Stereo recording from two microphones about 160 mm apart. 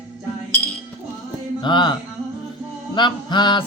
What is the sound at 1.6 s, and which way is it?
A man's voice, 30° left (ahead or behind).